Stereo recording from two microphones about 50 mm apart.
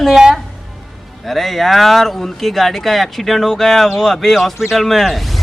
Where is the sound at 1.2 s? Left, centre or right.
Centre.